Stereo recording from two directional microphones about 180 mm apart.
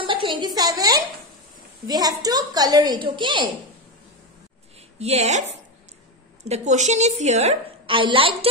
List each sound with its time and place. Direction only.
0.0 s a sound: 30° right (ahead or behind)
0.6 s a woman's voice: 20° right (ahead or behind)
4.9 s a woman's voice: 35° right (ahead or behind)